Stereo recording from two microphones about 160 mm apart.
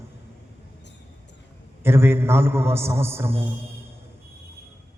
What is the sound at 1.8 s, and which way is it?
A man's voice, 15° right (ahead or behind).